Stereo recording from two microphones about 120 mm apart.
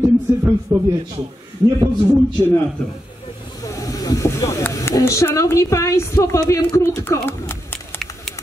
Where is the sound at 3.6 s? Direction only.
30° left (ahead or behind).